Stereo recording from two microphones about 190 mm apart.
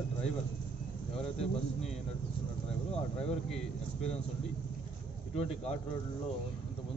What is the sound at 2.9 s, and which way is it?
Speech, 30° left (ahead or behind).